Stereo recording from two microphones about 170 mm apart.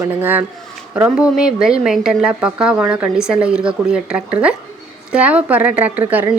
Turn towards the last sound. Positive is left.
turn(degrees=-10)  # may be behind; listen again after turning